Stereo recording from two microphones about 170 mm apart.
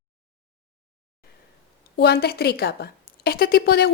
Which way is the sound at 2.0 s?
70° left (ahead or behind).